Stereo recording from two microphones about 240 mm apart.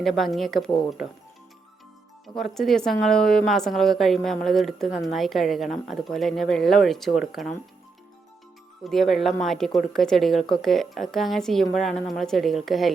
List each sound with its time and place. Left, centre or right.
0.0 s a woman's voice: centre
2.2 s a woman's voice: centre
8.8 s a woman's voice: centre